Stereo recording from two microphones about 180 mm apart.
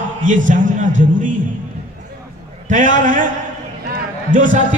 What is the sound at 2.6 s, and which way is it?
Speech, 45° right (ahead or behind).